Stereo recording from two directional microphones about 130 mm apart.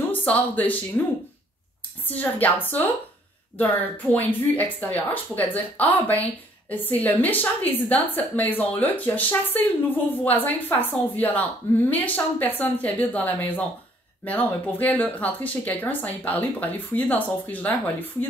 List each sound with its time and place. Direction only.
0.1 s speech: 15° left (ahead or behind)